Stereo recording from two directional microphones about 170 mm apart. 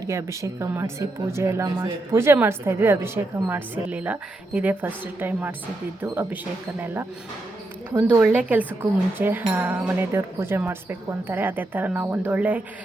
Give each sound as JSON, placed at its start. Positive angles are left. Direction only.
{"t": 0.0, "sound": "speech", "side_deg": -20}